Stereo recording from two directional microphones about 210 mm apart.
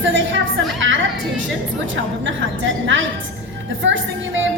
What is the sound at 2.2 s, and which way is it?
Speech, 65° right (ahead or behind).